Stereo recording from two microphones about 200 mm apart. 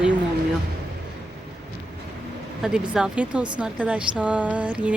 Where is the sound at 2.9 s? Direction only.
5° right (ahead or behind).